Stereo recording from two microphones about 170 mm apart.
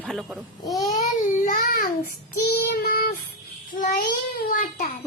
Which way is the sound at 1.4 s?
60° left (ahead or behind).